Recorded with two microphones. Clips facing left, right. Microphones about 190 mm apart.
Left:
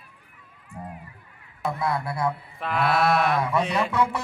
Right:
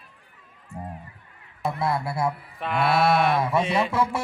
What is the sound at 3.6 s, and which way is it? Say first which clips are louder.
Music: right 1 dB; 5° right (ahead or behind).